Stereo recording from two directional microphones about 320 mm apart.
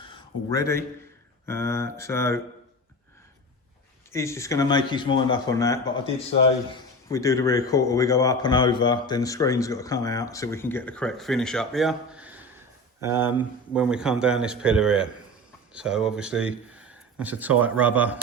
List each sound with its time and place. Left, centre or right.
0.0 s a sound: centre
1.5 s speech: centre
4.1 s a man's voice: centre